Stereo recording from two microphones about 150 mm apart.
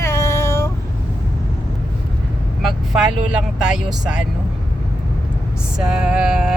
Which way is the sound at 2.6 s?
5° right (ahead or behind).